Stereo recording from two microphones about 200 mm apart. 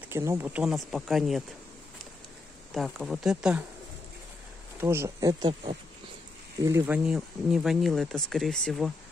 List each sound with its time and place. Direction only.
0.1 s speech: 15° right (ahead or behind)
2.7 s speech: centre (ahead or behind)
4.7 s speech: 10° right (ahead or behind)
6.6 s speech: 15° right (ahead or behind)
7.1 s speech: centre (ahead or behind)